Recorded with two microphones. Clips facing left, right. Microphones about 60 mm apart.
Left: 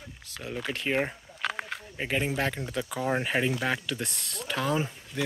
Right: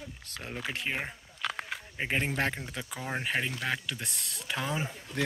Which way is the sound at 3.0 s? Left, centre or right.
Centre.